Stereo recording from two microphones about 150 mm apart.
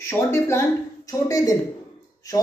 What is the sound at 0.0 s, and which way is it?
Speech, 15° left (ahead or behind).